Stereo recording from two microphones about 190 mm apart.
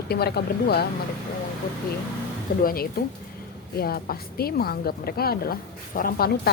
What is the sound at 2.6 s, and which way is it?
A woman's voice, 50° left (ahead or behind).